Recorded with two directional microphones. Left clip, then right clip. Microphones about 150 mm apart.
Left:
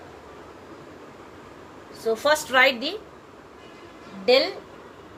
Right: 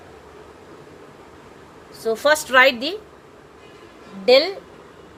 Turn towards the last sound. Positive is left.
turn(degrees=-90)